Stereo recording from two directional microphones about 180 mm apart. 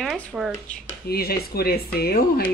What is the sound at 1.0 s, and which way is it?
Speech, 60° left (ahead or behind).